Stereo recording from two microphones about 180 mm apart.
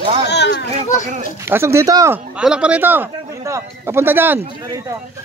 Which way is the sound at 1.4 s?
15° right (ahead or behind).